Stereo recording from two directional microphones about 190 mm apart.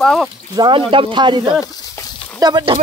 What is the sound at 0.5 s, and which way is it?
Speech, 25° right (ahead or behind).